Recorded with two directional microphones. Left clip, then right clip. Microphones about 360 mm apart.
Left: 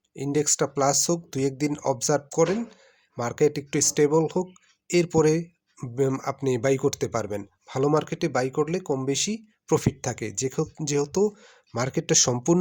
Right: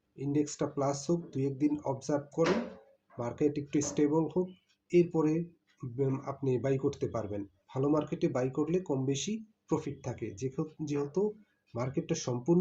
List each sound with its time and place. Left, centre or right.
0.2 s speech: left
9.1 s speech: left
9.6 s speech: left